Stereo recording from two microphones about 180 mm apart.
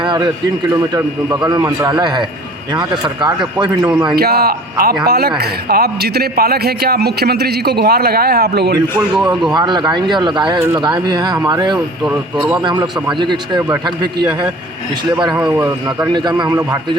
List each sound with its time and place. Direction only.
0.0 s a sound: 25° right (ahead or behind)
1.5 s speech: 20° right (ahead or behind)
4.1 s a man's voice: 60° right (ahead or behind)
9.0 s speech: 5° right (ahead or behind)
9.3 s speech: 25° right (ahead or behind)
12.1 s a man's voice: 10° right (ahead or behind)
12.6 s speech: 20° right (ahead or behind)
15.1 s speech: 20° right (ahead or behind)